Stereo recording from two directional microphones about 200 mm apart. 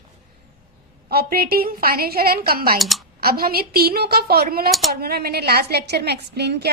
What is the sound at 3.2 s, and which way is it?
A woman's voice, 50° right (ahead or behind).